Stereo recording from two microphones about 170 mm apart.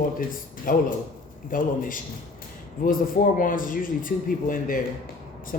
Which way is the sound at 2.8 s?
55° left (ahead or behind).